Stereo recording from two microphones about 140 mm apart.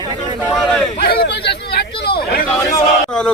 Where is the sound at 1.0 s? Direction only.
90° left.